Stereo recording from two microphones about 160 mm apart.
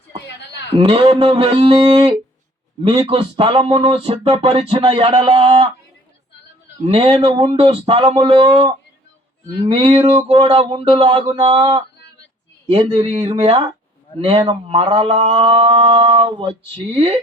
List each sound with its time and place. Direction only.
0.8 s speech: 35° right (ahead or behind)
6.8 s speech: 40° right (ahead or behind)
9.6 s a sound: 30° right (ahead or behind)
10.2 s speech: 30° right (ahead or behind)